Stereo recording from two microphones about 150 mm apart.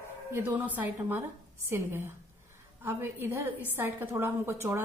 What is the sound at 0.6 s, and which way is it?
A woman's voice, 10° right (ahead or behind).